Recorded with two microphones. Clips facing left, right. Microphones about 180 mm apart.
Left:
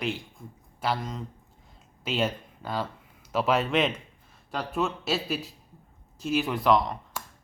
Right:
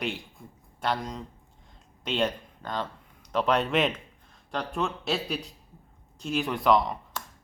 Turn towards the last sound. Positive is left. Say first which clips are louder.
# even
turn(degrees=0)  # may be behind; listen again after turning